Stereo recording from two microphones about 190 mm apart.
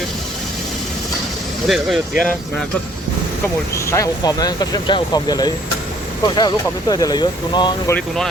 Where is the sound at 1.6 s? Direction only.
Centre (ahead or behind).